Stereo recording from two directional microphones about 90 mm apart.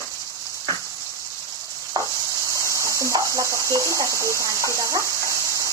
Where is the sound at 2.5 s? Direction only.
35° right (ahead or behind).